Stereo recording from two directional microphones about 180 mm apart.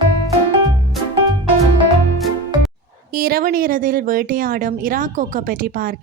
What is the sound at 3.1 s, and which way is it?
Speech, 55° right (ahead or behind).